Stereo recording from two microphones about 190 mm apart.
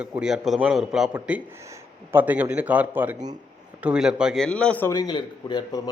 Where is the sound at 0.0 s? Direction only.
5° right (ahead or behind).